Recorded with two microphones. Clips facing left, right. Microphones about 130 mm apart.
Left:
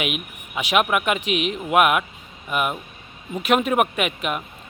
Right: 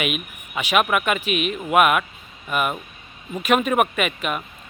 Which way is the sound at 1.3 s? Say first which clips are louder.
Even; 90° left.